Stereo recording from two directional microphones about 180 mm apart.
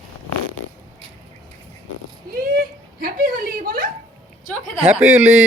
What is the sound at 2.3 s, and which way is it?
Speech, 55° right (ahead or behind).